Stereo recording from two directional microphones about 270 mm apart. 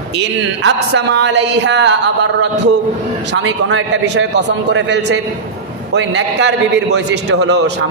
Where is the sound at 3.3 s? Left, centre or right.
Right.